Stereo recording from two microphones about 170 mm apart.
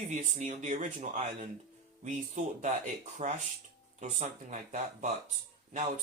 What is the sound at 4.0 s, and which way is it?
Speech, 45° right (ahead or behind).